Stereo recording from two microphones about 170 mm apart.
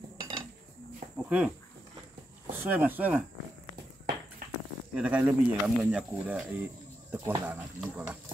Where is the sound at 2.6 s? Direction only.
10° right (ahead or behind).